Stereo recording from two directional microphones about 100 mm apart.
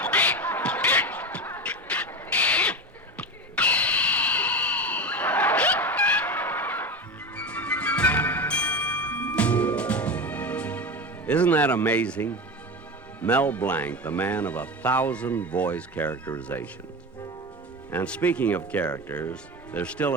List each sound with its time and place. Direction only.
0.0 s music: 15° left (ahead or behind)
3.2 s a sound: 15° left (ahead or behind)
13.1 s speech: 15° left (ahead or behind)
17.9 s speech: 15° left (ahead or behind)